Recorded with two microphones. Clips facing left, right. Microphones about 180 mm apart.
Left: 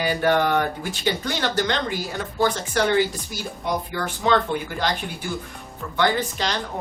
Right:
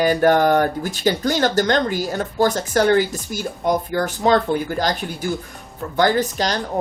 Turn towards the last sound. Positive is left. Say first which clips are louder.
# right 5 dB
turn(degrees=-40)  # may be behind; listen again after turning